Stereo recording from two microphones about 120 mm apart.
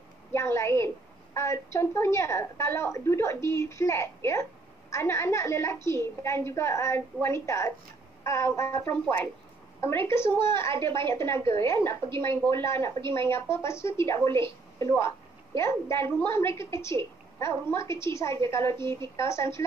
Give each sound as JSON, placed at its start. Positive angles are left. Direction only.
{"t": 0.3, "sound": "a woman's voice", "side_deg": 25}
{"t": 18.8, "sound": "a woman's voice", "side_deg": -40}
{"t": 19.1, "sound": "a woman's voice", "side_deg": 25}